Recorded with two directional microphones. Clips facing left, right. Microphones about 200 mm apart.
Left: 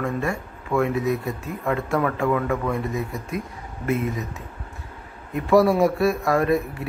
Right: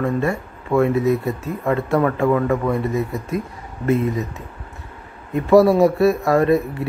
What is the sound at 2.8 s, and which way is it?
Speech, centre (ahead or behind).